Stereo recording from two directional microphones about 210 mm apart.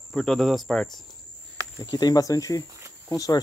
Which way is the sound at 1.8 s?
20° left (ahead or behind).